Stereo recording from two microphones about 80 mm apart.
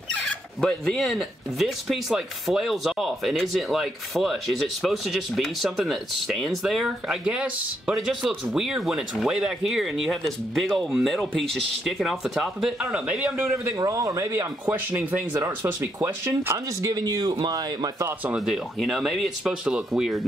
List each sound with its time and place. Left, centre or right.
0.2 s speech: centre
7.2 s speech: centre
7.9 s speech: centre
13.7 s speech: right
14.7 s speech: right
15.3 s speech: right
16.8 s speech: right
18.0 s speech: right
18.8 s speech: centre